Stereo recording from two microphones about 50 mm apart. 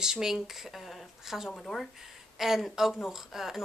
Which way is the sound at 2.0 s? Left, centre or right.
Centre.